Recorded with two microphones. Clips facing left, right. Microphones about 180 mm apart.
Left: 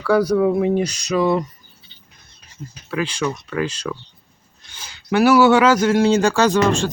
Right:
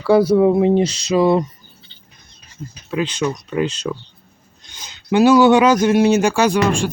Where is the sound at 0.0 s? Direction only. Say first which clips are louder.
Right 4 dB; 30° right (ahead or behind).